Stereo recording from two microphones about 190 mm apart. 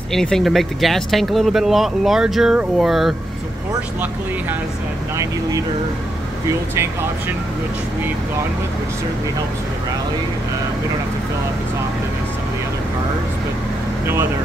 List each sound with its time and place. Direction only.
0.1 s speech: centre (ahead or behind)
5.1 s speech: 15° right (ahead or behind)
6.7 s speech: 10° right (ahead or behind)